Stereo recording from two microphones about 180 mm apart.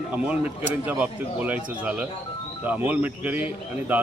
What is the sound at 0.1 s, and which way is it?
Speech, 5° right (ahead or behind).